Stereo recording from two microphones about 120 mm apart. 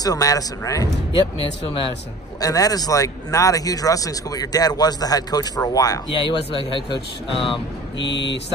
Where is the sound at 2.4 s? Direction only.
30° left (ahead or behind).